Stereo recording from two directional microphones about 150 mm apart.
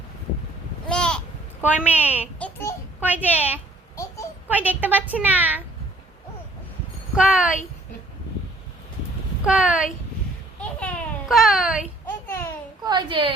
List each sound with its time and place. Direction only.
0.9 s babbling: 5° left (ahead or behind)
1.6 s a woman's voice: 10° right (ahead or behind)
2.4 s child singing: 15° left (ahead or behind)
3.0 s a woman's voice: 10° right (ahead or behind)
7.2 s a woman's voice: 5° right (ahead or behind)
9.4 s speech: 5° right (ahead or behind)
10.6 s babbling: 10° left (ahead or behind)
12.8 s a woman's voice: 30° right (ahead or behind)